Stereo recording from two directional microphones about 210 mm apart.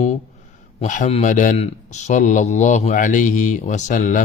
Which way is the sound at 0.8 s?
35° left (ahead or behind).